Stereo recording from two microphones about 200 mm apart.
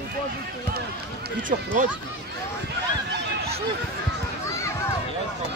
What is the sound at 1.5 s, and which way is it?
Speech, 40° right (ahead or behind).